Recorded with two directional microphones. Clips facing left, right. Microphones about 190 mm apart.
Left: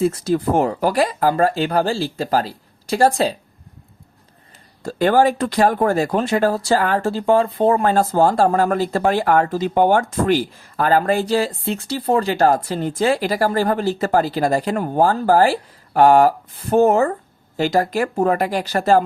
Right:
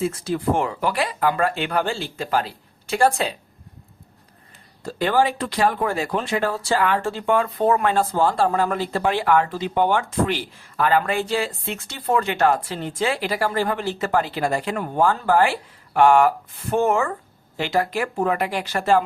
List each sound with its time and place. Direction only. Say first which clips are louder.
0.0 s speech: left 5 dB; 40° left (ahead or behind)
4.8 s speech: left 5 dB; 45° left (ahead or behind)